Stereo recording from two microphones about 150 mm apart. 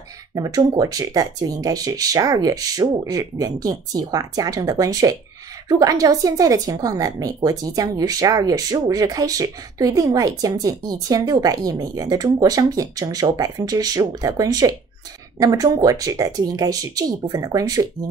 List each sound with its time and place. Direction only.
0.3 s a woman's voice: 25° right (ahead or behind)